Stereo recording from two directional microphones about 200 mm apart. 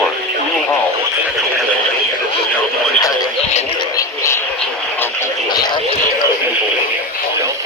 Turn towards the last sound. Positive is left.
turn(degrees=20)  # may be behind; listen again after turning